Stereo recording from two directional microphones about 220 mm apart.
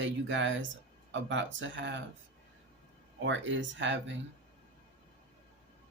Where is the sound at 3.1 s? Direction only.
55° right (ahead or behind).